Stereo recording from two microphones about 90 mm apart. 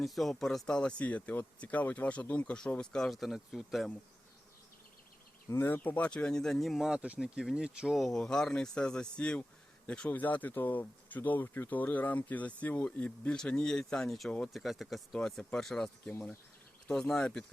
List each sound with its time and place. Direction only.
0.0 s speech: centre (ahead or behind)
5.5 s speech: 25° left (ahead or behind); by 8.0 s 10° right (ahead or behind)
8.0 s speech: 5° left (ahead or behind)
16.9 s speech: 5° left (ahead or behind)